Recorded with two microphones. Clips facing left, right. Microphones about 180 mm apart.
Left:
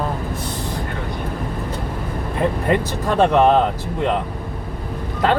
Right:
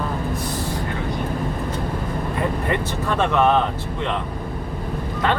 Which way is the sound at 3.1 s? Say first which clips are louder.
Left 4 dB; 35° left (ahead or behind).